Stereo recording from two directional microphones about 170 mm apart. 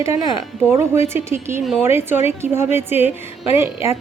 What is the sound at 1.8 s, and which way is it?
Speech, 15° right (ahead or behind).